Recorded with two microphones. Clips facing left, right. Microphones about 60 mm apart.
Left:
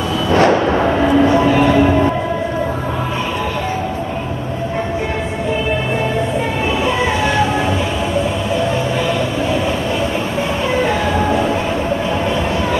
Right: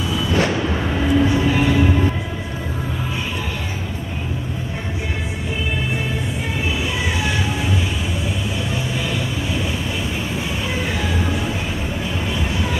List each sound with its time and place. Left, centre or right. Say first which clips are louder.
0.3 s music: left 9 dB; left
10.8 s vehicle: left 8 dB; left